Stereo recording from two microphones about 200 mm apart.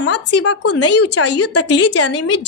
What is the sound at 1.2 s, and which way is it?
Speech, 90° left.